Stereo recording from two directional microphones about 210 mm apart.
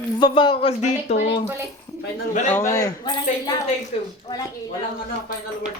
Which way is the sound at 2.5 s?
15° left (ahead or behind).